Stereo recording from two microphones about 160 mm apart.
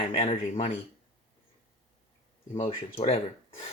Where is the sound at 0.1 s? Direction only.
40° left (ahead or behind).